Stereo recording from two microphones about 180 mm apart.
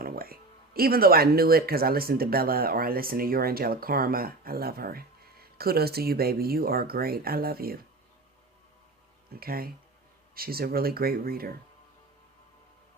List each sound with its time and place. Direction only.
0.0 s speech: 55° right (ahead or behind)
9.3 s speech: 55° right (ahead or behind)